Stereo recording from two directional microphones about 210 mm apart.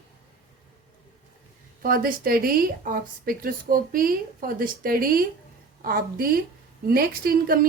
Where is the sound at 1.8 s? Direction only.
40° right (ahead or behind).